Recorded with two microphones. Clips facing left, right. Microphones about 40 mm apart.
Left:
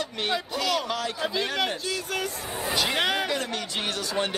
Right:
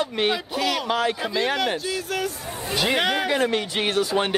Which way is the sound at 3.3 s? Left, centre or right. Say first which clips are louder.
Right 7 dB; right.